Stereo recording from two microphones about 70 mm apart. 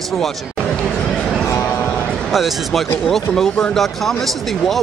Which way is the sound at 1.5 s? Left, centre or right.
Left.